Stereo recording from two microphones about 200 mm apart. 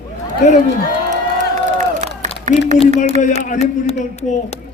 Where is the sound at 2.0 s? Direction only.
40° right (ahead or behind).